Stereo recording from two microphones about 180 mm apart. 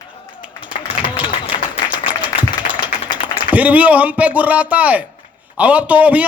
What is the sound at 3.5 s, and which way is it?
A man's voice, 10° right (ahead or behind).